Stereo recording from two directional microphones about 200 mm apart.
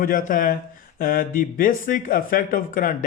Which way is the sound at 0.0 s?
45° left (ahead or behind).